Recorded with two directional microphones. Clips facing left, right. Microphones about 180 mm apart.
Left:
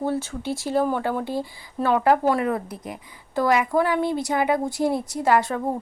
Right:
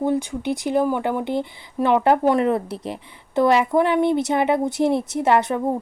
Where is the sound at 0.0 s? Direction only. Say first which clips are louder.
Right 4 dB; 15° right (ahead or behind).